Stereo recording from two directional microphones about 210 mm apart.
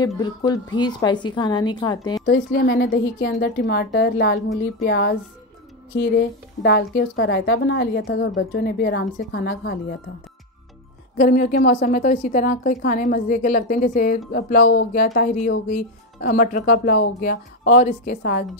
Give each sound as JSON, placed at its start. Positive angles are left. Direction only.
{"t": 0.0, "sound": "a woman's voice", "side_deg": 20}
{"t": 2.2, "sound": "a woman's voice", "side_deg": 50}
{"t": 11.1, "sound": "a woman's voice", "side_deg": 40}